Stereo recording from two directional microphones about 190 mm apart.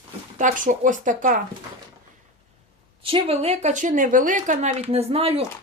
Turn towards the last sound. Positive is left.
turn(degrees=-30)  # may be behind; listen again after turning